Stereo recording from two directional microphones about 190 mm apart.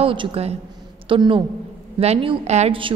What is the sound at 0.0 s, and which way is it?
A woman's voice, 30° right (ahead or behind).